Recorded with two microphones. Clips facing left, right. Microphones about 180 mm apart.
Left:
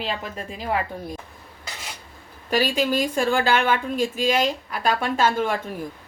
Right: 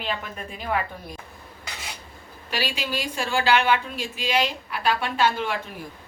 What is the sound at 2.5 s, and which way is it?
A woman's voice, 45° left (ahead or behind).